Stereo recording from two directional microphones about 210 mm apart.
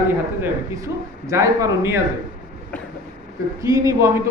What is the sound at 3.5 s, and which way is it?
Speech, 15° right (ahead or behind).